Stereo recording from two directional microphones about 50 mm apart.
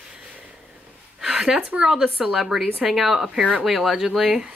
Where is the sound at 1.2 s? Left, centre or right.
Centre.